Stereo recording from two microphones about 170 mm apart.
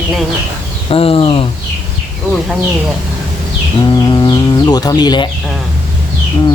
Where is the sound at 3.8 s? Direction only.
25° left (ahead or behind).